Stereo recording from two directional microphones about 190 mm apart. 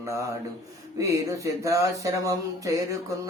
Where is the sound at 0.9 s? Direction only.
15° right (ahead or behind).